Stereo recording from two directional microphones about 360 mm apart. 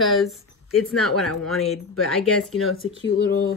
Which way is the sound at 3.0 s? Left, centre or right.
Left.